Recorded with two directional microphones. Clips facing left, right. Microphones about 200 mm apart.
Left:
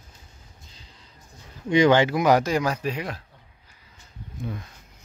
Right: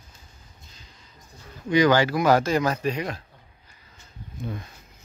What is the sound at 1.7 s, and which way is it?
Speech, 25° left (ahead or behind).